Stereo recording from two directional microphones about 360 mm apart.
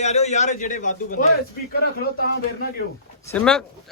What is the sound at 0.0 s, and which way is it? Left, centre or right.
A man's voice, centre.